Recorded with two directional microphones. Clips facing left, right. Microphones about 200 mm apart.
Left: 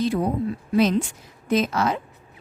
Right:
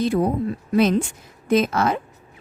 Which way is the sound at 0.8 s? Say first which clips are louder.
Right 2 dB; 55° right (ahead or behind).